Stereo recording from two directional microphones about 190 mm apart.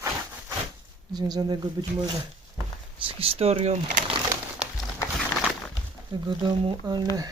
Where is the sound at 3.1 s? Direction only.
30° right (ahead or behind).